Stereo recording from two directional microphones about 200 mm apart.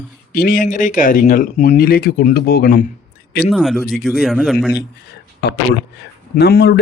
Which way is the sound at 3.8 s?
50° left (ahead or behind).